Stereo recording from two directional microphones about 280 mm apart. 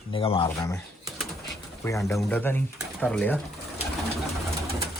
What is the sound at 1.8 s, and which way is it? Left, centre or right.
Speech, centre.